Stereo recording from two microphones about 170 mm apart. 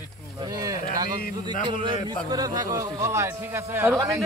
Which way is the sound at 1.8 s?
25° right (ahead or behind).